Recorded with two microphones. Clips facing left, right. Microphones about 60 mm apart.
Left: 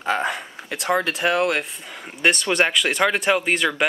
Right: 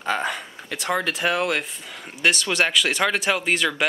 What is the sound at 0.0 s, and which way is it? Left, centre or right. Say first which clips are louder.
Speech: left 2 dB; centre.